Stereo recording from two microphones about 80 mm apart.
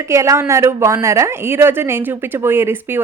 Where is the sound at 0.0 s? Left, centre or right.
Right.